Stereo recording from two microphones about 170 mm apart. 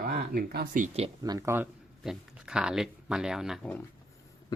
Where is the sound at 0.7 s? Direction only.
40° right (ahead or behind).